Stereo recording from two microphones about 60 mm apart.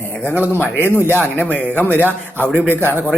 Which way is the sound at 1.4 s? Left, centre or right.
Left.